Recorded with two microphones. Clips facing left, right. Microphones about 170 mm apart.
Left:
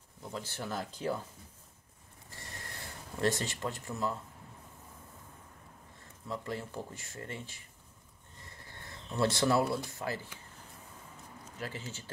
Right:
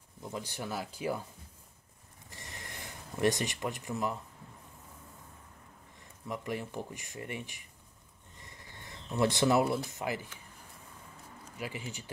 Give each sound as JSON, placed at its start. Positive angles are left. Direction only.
{"t": 0.2, "sound": "speech", "side_deg": -15}
{"t": 2.3, "sound": "a sound", "side_deg": -20}
{"t": 6.2, "sound": "speech", "side_deg": -15}
{"t": 9.1, "sound": "speech", "side_deg": -15}
{"t": 11.5, "sound": "speech", "side_deg": -15}